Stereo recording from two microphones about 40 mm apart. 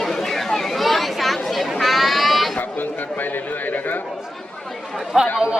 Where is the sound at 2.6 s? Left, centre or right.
Left.